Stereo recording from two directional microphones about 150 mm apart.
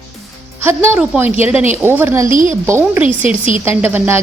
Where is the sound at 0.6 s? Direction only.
15° right (ahead or behind).